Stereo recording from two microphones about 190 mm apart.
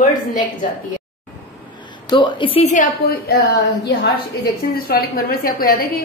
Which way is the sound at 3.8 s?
65° left (ahead or behind).